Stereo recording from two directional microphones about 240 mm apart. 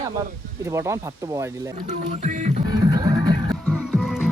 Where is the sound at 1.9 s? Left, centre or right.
Right.